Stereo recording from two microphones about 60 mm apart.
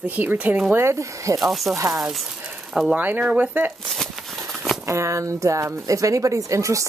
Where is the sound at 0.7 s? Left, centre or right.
Right.